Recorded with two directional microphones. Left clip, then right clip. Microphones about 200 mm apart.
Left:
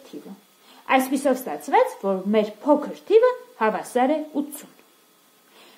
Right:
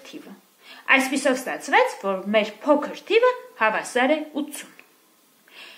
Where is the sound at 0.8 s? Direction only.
55° left (ahead or behind).